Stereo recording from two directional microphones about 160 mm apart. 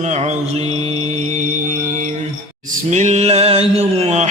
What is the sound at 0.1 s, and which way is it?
Mantra, 45° right (ahead or behind).